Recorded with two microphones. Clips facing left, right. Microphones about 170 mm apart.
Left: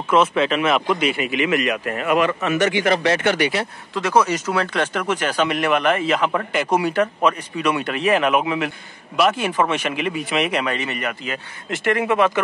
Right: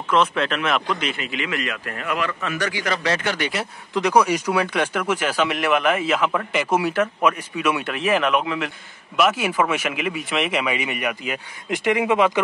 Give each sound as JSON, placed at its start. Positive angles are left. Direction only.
{"t": 0.1, "sound": "speech", "side_deg": 5}
{"t": 3.9, "sound": "speech", "side_deg": -15}